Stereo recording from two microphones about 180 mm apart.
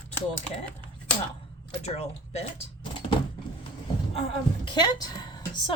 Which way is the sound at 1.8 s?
35° left (ahead or behind).